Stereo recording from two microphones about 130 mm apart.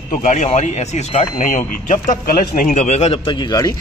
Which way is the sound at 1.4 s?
85° left.